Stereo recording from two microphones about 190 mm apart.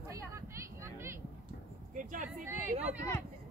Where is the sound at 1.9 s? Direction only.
45° right (ahead or behind).